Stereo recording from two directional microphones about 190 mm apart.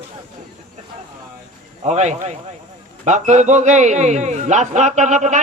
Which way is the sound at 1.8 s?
35° right (ahead or behind).